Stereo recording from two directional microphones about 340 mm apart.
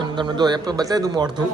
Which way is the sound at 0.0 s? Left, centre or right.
Centre.